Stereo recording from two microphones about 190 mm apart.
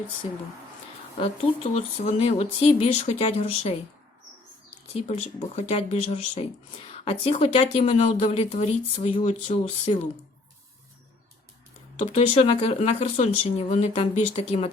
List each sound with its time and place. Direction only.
1.7 s speech: 35° left (ahead or behind)
4.9 s speech: 35° left (ahead or behind)
12.1 s speech: 30° left (ahead or behind)